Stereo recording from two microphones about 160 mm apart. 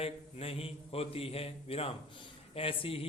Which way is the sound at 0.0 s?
35° left (ahead or behind).